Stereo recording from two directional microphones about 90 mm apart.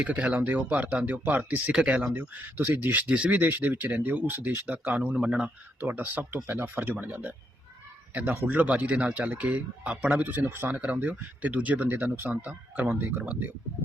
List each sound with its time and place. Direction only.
0.0 s speech: 15° right (ahead or behind)